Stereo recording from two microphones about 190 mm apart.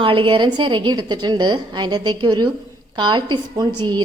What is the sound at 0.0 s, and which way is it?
A woman's voice, 25° right (ahead or behind).